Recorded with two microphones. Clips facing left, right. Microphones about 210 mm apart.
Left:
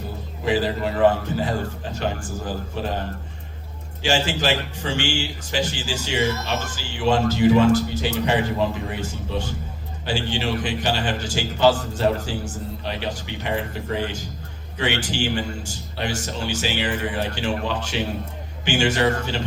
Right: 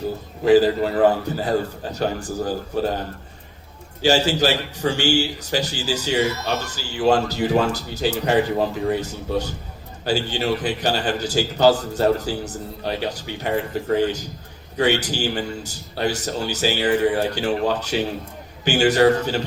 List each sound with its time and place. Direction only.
0.4 s a man's voice: 40° right (ahead or behind)
4.0 s a man's voice: 40° right (ahead or behind)
14.8 s a man's voice: 40° right (ahead or behind)